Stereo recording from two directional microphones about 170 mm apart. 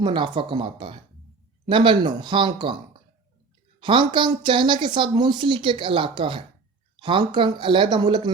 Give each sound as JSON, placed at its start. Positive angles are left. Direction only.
{"t": 0.0, "sound": "a woman's voice", "side_deg": -25}
{"t": 3.8, "sound": "a woman's voice", "side_deg": -30}